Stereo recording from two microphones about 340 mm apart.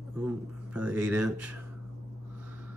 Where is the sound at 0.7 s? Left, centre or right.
Centre.